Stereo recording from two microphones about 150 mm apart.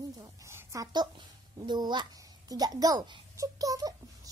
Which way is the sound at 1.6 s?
30° right (ahead or behind).